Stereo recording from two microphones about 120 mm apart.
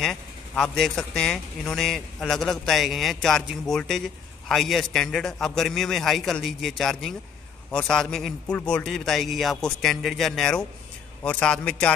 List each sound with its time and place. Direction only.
0.0 s a man's voice: 5° left (ahead or behind)